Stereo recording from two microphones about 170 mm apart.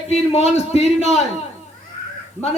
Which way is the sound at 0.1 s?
35° left (ahead or behind).